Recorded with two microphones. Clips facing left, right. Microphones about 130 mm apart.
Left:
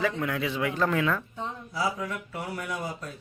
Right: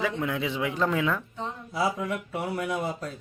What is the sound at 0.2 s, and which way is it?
Speech, 20° right (ahead or behind).